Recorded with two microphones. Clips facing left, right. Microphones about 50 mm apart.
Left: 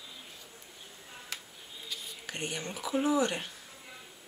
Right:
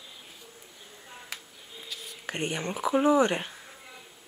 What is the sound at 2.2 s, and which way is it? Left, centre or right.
Speech, right.